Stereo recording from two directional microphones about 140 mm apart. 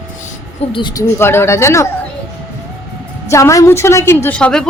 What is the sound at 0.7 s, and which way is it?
Speech, 35° left (ahead or behind).